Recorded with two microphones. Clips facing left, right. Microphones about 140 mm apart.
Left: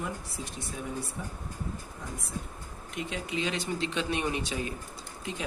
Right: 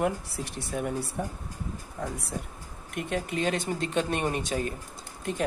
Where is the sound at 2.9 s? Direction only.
55° right (ahead or behind).